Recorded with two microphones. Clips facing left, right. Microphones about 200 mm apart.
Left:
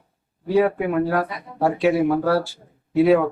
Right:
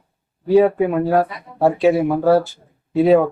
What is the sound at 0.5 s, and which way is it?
Speech, 25° right (ahead or behind).